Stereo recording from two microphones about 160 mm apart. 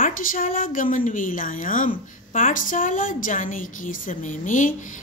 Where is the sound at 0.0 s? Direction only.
60° left (ahead or behind).